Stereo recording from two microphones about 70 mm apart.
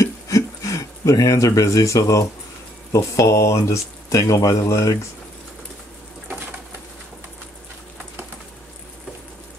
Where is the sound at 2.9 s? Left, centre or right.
Left.